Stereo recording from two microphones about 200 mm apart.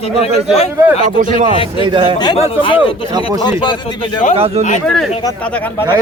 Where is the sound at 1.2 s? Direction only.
40° right (ahead or behind).